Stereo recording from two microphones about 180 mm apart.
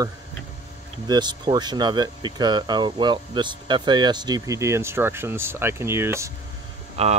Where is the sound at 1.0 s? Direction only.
25° right (ahead or behind).